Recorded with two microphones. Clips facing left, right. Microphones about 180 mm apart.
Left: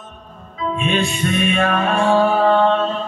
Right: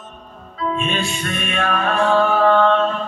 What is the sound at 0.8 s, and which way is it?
Music, centre (ahead or behind).